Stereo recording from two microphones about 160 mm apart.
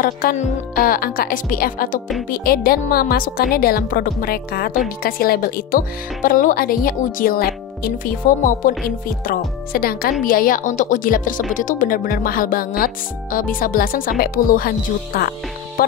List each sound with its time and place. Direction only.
0.0 s speech: 60° left (ahead or behind)